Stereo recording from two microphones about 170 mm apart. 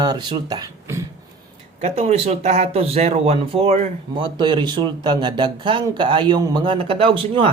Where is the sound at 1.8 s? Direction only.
40° right (ahead or behind).